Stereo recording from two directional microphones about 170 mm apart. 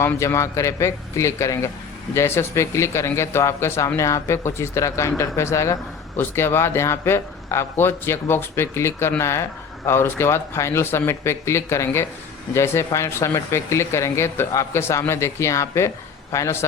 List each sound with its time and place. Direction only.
0.0 s a man's voice: 15° left (ahead or behind)